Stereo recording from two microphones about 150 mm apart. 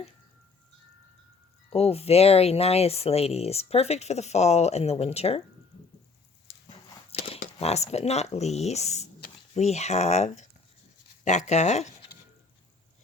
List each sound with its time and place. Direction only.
1.7 s speech: 45° left (ahead or behind)
7.1 s speech: 45° left (ahead or behind)